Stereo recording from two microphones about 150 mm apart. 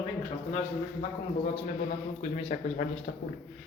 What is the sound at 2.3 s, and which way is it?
Speech, 45° left (ahead or behind).